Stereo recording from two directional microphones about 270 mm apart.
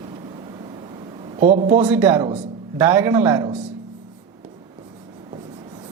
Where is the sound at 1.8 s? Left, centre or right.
Centre.